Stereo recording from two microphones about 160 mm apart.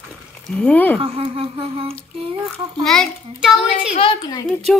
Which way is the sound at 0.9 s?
35° right (ahead or behind).